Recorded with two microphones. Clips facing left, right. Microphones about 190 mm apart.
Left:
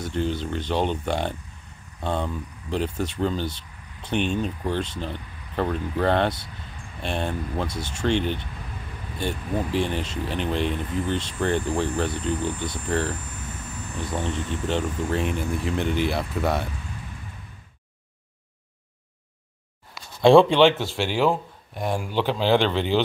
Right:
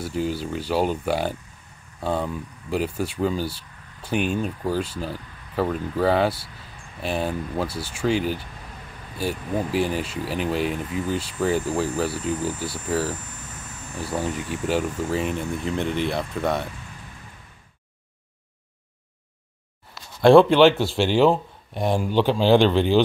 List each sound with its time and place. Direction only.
0.0 s speech: 5° right (ahead or behind)
20.2 s speech: 5° right (ahead or behind)
21.1 s speech: 25° right (ahead or behind)